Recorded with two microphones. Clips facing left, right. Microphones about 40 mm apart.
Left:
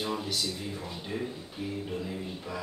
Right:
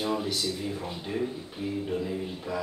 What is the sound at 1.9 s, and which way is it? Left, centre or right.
Speech, centre.